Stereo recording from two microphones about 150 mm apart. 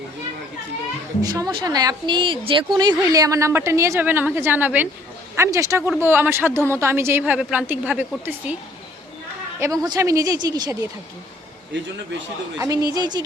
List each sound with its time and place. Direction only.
1.2 s a woman's voice: 25° right (ahead or behind)
9.8 s speech: 25° right (ahead or behind)
12.5 s speech: 25° right (ahead or behind)